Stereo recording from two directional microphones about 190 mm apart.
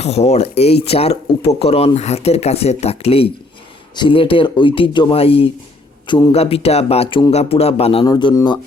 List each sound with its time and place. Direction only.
0.0 s speech: 35° left (ahead or behind)
6.1 s a man's voice: 15° left (ahead or behind)
6.3 s speech: 30° left (ahead or behind)